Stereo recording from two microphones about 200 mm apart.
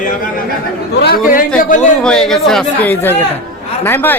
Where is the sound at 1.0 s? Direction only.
45° left (ahead or behind).